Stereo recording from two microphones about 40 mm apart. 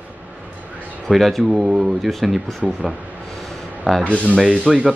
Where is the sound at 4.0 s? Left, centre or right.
Left.